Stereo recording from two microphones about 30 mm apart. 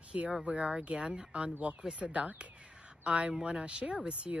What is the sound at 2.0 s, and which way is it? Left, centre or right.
Speech, centre.